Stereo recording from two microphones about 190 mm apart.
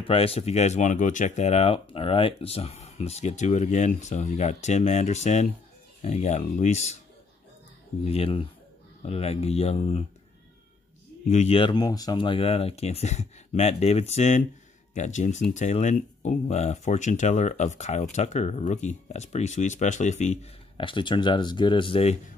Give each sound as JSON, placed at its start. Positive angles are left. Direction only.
{"t": 0.0, "sound": "speech", "side_deg": 30}
{"t": 8.1, "sound": "speech", "side_deg": 30}
{"t": 11.2, "sound": "speech", "side_deg": 35}